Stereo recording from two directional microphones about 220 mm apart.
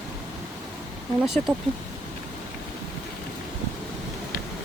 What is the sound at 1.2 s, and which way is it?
Speech, centre (ahead or behind).